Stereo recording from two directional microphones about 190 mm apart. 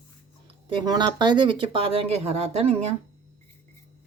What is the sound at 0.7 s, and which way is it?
Speech, 20° right (ahead or behind).